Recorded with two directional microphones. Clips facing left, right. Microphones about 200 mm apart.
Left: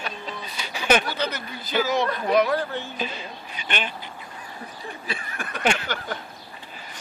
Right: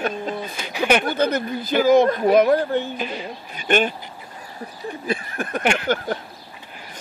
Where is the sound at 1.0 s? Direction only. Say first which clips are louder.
Right 8 dB; 50° right (ahead or behind).